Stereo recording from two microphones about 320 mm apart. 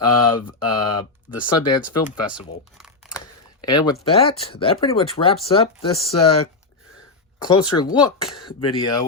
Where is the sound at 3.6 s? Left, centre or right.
Centre.